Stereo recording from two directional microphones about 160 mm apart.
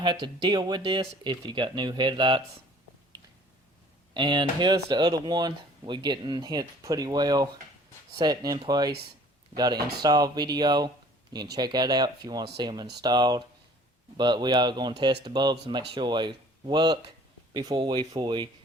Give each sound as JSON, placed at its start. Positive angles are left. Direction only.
{"t": 0.0, "sound": "speech", "side_deg": -30}
{"t": 4.1, "sound": "speech", "side_deg": -30}